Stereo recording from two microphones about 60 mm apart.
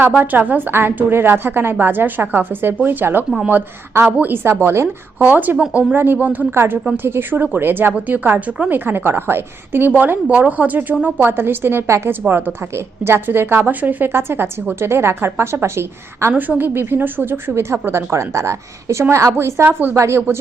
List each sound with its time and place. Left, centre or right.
0.2 s a woman's voice: right
5.2 s a woman's voice: right
6.5 s a woman's voice: right
9.9 s a woman's voice: right
16.3 s a woman's voice: right
19.6 s a woman's voice: right
20.0 s a woman's voice: right